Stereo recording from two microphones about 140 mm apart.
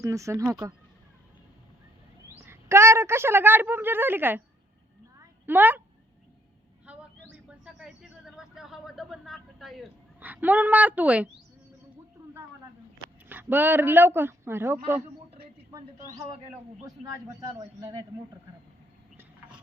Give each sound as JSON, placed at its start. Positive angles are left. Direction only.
{"t": 0.0, "sound": "speech", "side_deg": -20}
{"t": 2.3, "sound": "a woman's voice", "side_deg": -15}
{"t": 5.5, "sound": "a woman's voice", "side_deg": -15}
{"t": 6.9, "sound": "vehicle", "side_deg": -10}
{"t": 7.5, "sound": "a sound", "side_deg": -5}
{"t": 10.2, "sound": "a woman's voice", "side_deg": -10}
{"t": 13.2, "sound": "a man's voice", "side_deg": -15}
{"t": 16.8, "sound": "speech", "side_deg": -25}